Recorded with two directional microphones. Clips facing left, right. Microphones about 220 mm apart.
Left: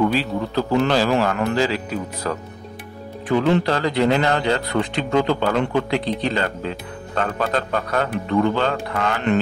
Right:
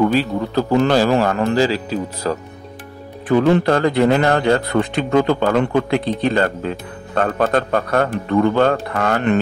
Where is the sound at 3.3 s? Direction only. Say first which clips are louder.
Right 4 dB; 50° right (ahead or behind).